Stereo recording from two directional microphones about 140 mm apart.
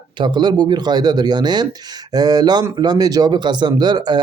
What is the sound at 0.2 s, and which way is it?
Speech, 30° right (ahead or behind).